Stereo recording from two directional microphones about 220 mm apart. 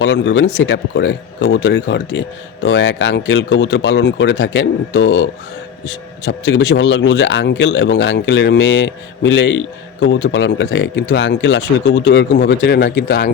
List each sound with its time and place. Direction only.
0.0 s speech: 55° left (ahead or behind)